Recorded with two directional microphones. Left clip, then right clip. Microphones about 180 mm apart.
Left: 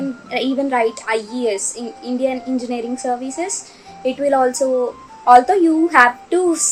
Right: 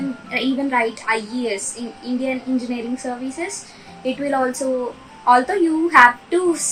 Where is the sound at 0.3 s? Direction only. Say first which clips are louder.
Left 2 dB; 20° left (ahead or behind).